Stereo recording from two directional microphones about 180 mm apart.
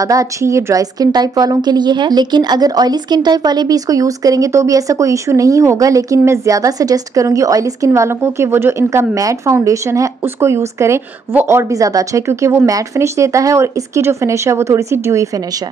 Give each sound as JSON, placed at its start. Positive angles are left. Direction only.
{"t": 0.0, "sound": "a woman's voice", "side_deg": -20}